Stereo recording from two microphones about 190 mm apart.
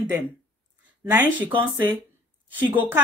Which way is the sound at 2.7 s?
10° right (ahead or behind).